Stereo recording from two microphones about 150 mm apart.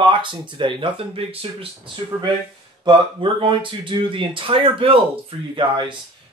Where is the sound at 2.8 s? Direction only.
35° right (ahead or behind).